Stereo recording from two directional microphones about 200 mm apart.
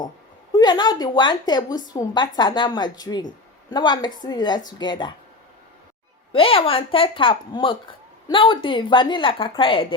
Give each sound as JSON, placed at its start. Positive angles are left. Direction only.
{"t": 0.5, "sound": "speech", "side_deg": 20}
{"t": 6.3, "sound": "speech", "side_deg": 30}